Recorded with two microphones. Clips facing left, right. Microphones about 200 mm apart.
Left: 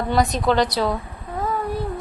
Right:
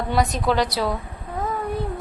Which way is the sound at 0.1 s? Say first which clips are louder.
Left 2 dB; 5° right (ahead or behind).